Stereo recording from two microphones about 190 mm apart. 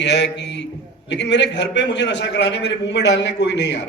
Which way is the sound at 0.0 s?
65° left (ahead or behind).